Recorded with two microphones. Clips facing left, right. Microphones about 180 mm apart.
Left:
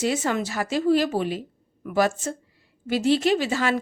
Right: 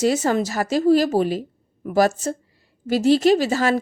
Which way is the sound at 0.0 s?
40° right (ahead or behind).